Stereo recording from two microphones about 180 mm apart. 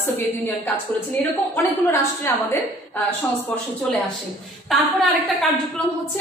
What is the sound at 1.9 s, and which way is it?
Speech, 15° left (ahead or behind).